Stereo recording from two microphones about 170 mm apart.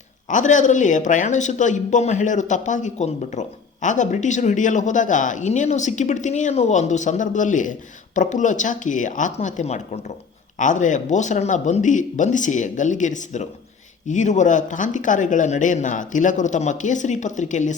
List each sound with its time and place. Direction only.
0.3 s speech: 45° left (ahead or behind)